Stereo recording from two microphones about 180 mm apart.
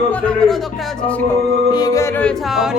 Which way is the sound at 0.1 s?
5° left (ahead or behind).